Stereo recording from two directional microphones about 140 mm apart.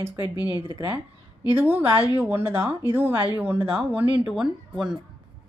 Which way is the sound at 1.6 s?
15° right (ahead or behind).